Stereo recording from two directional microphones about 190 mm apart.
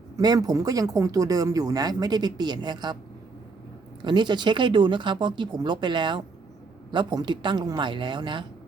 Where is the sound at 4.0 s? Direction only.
25° right (ahead or behind).